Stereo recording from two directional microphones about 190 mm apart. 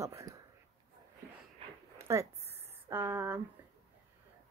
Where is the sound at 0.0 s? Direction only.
15° right (ahead or behind).